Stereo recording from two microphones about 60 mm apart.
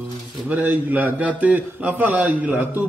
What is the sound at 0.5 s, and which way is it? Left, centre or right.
Speech, right.